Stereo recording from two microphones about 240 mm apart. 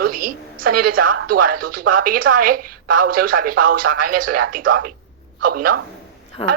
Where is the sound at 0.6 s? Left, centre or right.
Right.